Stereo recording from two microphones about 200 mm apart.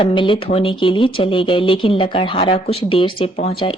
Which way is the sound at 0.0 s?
25° left (ahead or behind).